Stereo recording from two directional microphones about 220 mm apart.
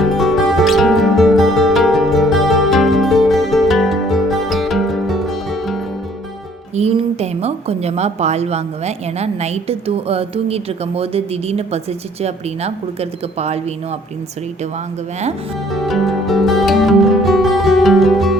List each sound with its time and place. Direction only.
0.0 s music: centre (ahead or behind)
6.7 s a woman's voice: 30° right (ahead or behind)
15.7 s music: centre (ahead or behind)